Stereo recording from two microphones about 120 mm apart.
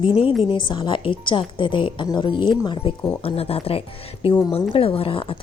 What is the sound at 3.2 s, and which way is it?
A woman's voice, 55° left (ahead or behind).